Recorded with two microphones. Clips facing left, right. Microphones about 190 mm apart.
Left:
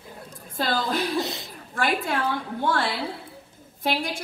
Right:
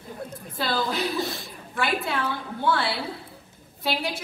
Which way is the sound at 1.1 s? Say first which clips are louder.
Left 1 dB; 20° left (ahead or behind).